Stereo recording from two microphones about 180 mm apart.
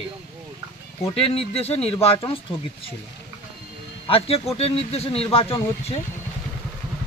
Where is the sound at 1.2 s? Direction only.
35° left (ahead or behind).